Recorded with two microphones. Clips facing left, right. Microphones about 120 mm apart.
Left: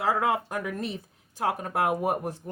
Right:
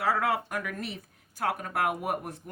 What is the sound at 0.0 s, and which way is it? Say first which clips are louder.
Speech: left 2 dB; 30° left (ahead or behind).